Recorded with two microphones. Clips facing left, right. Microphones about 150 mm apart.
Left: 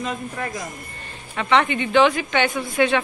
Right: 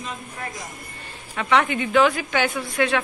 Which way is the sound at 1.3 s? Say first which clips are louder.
Left 1 dB; 5° right (ahead or behind).